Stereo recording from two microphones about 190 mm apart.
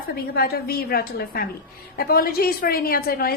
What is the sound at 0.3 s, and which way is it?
A woman's voice, 55° left (ahead or behind).